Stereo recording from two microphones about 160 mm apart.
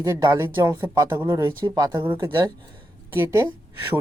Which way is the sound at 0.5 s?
15° right (ahead or behind).